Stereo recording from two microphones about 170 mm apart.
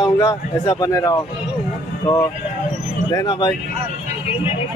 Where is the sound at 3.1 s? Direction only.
20° left (ahead or behind).